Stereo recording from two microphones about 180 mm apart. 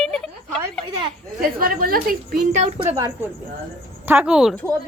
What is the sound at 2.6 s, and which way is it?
Speech, 40° right (ahead or behind).